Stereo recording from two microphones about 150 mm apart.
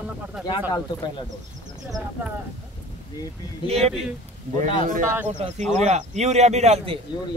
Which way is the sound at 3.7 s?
45° right (ahead or behind).